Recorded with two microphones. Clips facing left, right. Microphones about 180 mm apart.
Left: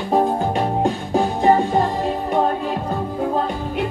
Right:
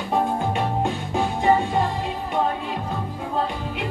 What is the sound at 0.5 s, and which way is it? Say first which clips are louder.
Music: left 4 dB; 35° left (ahead or behind).